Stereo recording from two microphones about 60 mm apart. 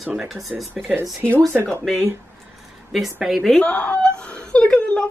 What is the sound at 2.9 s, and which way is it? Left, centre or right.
Speech, centre.